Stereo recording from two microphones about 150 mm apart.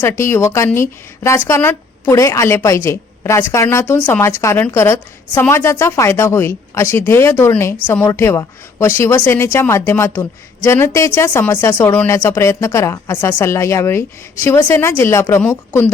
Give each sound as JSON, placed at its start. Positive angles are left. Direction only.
{"t": 0.0, "sound": "a woman's voice", "side_deg": 15}